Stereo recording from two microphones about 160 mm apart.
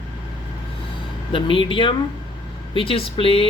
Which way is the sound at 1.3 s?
35° left (ahead or behind).